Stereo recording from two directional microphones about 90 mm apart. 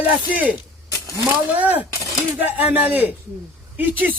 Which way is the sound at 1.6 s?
20° right (ahead or behind).